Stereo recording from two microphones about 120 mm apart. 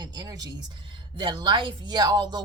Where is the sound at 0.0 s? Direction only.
35° right (ahead or behind).